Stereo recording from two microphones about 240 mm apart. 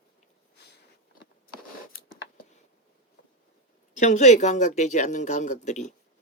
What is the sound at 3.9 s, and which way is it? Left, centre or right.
Speech, left.